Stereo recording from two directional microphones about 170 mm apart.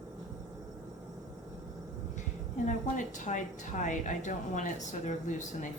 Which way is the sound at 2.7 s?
50° left (ahead or behind).